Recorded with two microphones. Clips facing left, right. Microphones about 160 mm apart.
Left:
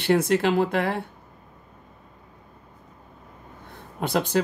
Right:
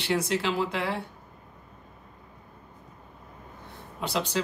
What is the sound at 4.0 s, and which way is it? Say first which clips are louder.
Speech: left 6 dB; 55° left (ahead or behind).